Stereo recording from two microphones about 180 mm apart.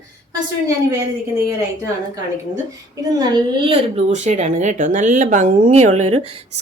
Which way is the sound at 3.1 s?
25° right (ahead or behind).